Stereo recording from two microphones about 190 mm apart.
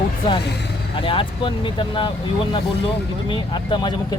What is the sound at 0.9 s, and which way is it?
Speech, 30° left (ahead or behind).